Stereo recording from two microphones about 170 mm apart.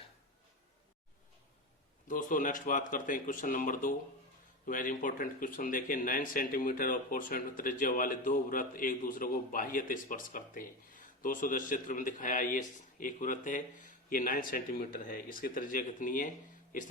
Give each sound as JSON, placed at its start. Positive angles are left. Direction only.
{"t": 2.0, "sound": "speech", "side_deg": 50}